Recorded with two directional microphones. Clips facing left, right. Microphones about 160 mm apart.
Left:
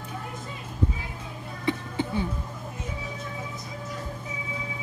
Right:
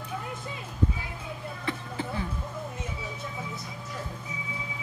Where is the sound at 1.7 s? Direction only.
25° left (ahead or behind).